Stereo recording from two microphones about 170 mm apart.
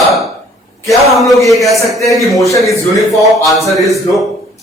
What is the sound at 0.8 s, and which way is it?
A man's voice, centre (ahead or behind).